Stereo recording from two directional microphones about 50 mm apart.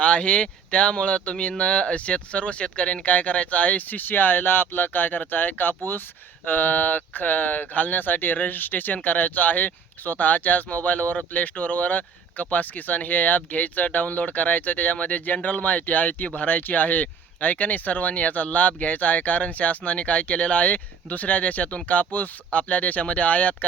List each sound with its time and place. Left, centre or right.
0.0 s speech: left